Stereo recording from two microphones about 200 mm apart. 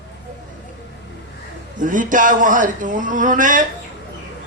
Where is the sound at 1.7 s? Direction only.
40° right (ahead or behind).